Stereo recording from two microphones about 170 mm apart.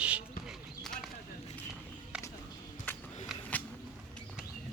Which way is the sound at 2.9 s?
10° left (ahead or behind).